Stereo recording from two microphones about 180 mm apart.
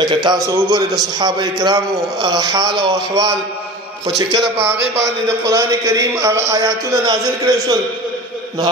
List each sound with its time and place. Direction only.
0.0 s a man's voice: 25° right (ahead or behind)